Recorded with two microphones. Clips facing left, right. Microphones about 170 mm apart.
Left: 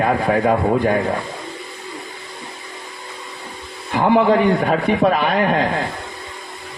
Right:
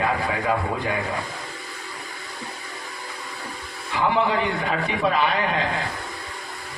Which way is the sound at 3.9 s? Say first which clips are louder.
Left 7 dB; 50° left (ahead or behind).